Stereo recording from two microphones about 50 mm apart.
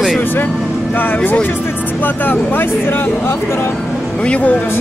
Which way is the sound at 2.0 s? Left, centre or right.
Left.